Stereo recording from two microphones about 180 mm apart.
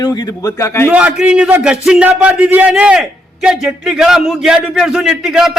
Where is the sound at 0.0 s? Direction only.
20° left (ahead or behind).